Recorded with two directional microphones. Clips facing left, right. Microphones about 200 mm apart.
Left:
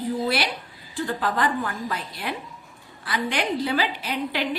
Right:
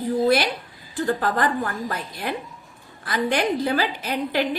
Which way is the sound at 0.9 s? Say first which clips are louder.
Right 3 dB; 45° right (ahead or behind).